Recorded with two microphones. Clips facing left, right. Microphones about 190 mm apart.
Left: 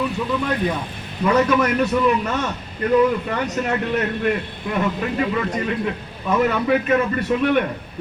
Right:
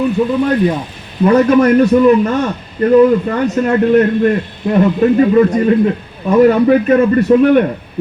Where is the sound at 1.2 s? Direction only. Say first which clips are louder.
Right 8 dB; 45° right (ahead or behind).